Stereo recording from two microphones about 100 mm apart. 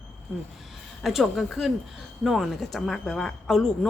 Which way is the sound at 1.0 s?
Centre (ahead or behind).